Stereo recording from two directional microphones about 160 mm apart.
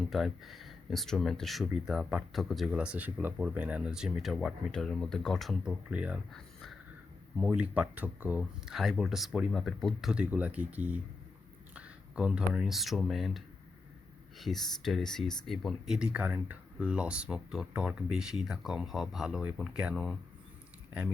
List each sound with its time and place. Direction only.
0.1 s speech: centre (ahead or behind)
6.3 s a sound: 5° left (ahead or behind)
7.3 s speech: 10° right (ahead or behind)